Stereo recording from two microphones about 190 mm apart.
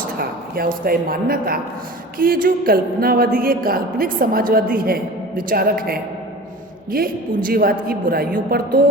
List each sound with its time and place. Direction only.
0.2 s a woman's voice: 50° right (ahead or behind)